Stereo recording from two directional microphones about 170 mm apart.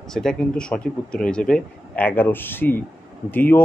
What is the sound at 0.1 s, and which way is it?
Speech, 5° left (ahead or behind).